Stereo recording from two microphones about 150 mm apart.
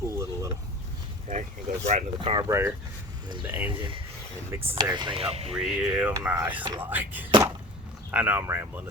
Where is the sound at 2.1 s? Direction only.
35° right (ahead or behind).